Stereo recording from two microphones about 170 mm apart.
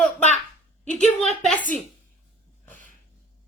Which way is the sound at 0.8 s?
40° left (ahead or behind).